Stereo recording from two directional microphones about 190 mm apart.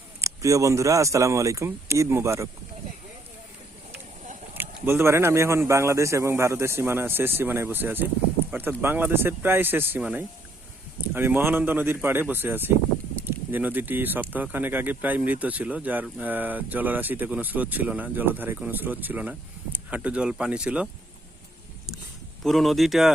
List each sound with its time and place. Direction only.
0.2 s speech: 15° right (ahead or behind)
4.5 s speech: 10° right (ahead or behind)
22.4 s speech: centre (ahead or behind)